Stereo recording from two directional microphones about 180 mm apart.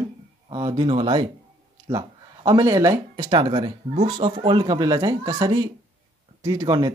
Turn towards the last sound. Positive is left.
turn(degrees=-20)  # may be behind; listen again after turning